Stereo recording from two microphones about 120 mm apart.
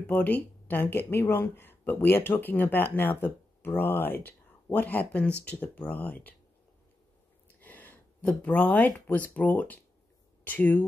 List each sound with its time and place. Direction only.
0.0 s speech: 15° left (ahead or behind)
7.6 s a sound: 15° left (ahead or behind)
8.3 s speech: 10° left (ahead or behind)